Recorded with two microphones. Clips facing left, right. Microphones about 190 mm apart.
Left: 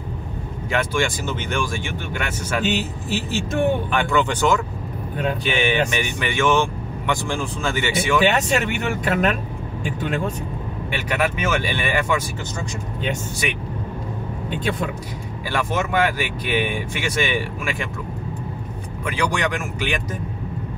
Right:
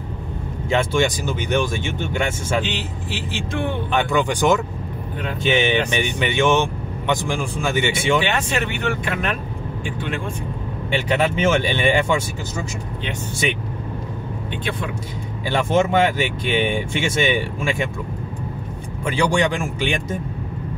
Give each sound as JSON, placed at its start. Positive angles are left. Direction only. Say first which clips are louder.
{"t": 0.7, "sound": "speech", "louder": "right 3 dB", "side_deg": -25}
{"t": 2.6, "sound": "speech", "louder": "left 4 dB", "side_deg": 45}
{"t": 3.9, "sound": "speech", "louder": "right 1 dB", "side_deg": -15}
{"t": 8.2, "sound": "speech", "louder": "left 3 dB", "side_deg": 40}
{"t": 10.9, "sound": "speech", "louder": "right 3 dB", "side_deg": -25}
{"t": 15.5, "sound": "speech", "louder": "right 5 dB", "side_deg": -25}
{"t": 19.0, "sound": "speech", "louder": "right 4 dB", "side_deg": -30}